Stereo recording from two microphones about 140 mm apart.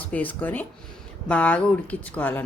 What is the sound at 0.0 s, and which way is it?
A woman's voice, 10° left (ahead or behind).